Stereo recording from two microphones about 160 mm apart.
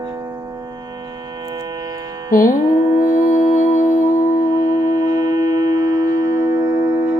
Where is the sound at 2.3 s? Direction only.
60° left (ahead or behind).